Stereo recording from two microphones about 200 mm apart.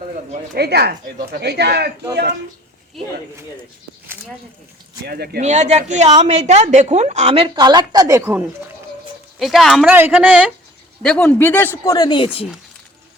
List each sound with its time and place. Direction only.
0.5 s speech: 55° right (ahead or behind)
5.0 s speech: 50° right (ahead or behind)
5.4 s a woman's voice: 35° right (ahead or behind); by 8.4 s 10° right (ahead or behind)
9.4 s speech: centre (ahead or behind)
11.0 s speech: 5° left (ahead or behind); by 12.5 s 25° left (ahead or behind)